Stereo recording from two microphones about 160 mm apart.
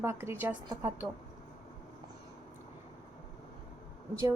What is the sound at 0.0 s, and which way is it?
Speech, 15° right (ahead or behind).